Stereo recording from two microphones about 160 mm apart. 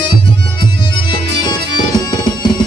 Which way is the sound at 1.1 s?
25° left (ahead or behind).